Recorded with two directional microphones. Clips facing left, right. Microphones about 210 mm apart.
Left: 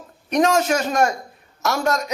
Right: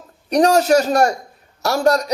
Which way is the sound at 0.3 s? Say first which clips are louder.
Right 4 dB; 35° right (ahead or behind).